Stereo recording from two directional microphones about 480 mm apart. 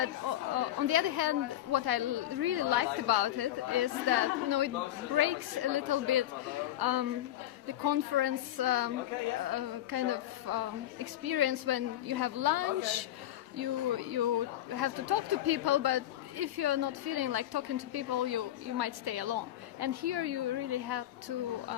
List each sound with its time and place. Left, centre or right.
0.0 s speech: right